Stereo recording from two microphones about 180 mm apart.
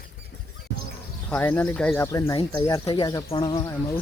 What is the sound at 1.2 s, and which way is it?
Speech, 10° left (ahead or behind).